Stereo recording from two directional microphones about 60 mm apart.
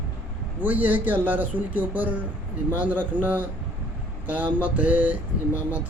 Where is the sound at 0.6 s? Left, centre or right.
Right.